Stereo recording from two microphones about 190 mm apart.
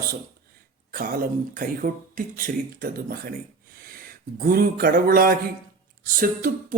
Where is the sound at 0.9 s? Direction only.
45° right (ahead or behind).